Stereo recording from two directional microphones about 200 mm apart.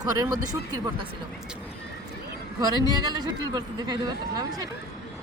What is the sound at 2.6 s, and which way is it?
Speech, 20° right (ahead or behind).